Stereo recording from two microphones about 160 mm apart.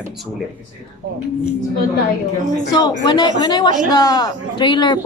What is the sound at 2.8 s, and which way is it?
Speech, 30° left (ahead or behind).